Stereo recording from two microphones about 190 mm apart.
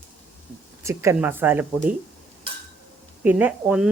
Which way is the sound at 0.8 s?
15° right (ahead or behind).